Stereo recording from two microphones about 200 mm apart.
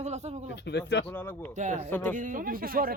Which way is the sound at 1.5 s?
35° right (ahead or behind).